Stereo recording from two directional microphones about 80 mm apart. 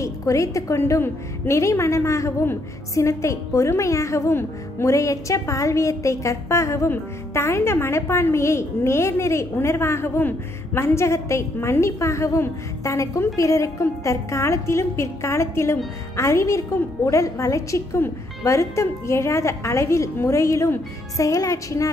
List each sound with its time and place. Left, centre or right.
0.0 s a woman's voice: left
21.2 s music: left